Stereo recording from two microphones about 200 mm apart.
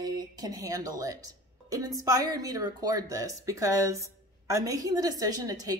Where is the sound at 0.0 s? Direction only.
20° right (ahead or behind).